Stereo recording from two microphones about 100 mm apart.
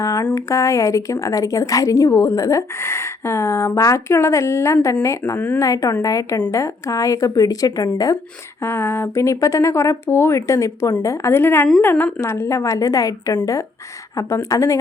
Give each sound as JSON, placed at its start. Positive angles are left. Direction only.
{"t": 0.0, "sound": "a sound", "side_deg": 35}
{"t": 0.3, "sound": "a woman's voice", "side_deg": 30}
{"t": 8.6, "sound": "a woman's voice", "side_deg": 25}